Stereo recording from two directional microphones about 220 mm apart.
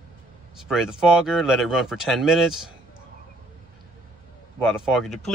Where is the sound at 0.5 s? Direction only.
Centre (ahead or behind).